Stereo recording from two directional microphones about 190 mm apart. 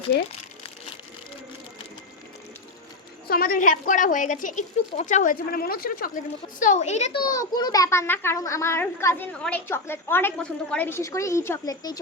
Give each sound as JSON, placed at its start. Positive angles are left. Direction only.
{"t": 3.2, "sound": "a woman's voice", "side_deg": 50}
{"t": 7.2, "sound": "a child's voice", "side_deg": 20}